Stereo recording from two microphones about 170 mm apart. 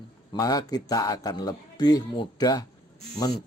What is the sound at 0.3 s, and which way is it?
A man's voice, 20° left (ahead or behind).